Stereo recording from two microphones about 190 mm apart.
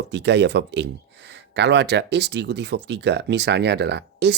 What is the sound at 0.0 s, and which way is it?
Speech, 65° right (ahead or behind).